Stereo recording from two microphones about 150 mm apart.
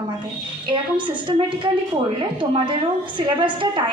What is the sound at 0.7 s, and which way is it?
A woman's voice, 30° right (ahead or behind).